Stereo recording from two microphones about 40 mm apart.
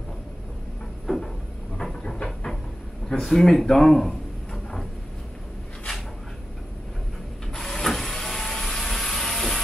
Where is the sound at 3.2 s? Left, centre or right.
Centre.